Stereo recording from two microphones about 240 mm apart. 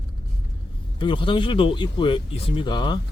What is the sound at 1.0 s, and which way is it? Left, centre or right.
Speech, centre.